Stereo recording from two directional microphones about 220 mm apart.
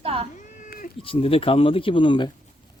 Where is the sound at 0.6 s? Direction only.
40° left (ahead or behind).